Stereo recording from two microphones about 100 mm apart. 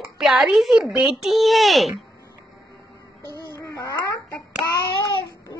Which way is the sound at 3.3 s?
35° left (ahead or behind).